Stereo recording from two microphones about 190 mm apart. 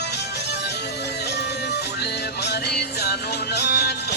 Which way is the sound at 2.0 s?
60° left (ahead or behind).